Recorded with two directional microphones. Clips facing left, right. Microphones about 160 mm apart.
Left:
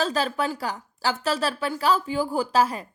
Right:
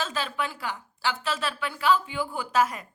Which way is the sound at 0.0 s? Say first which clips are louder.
Left 6 dB; 40° left (ahead or behind).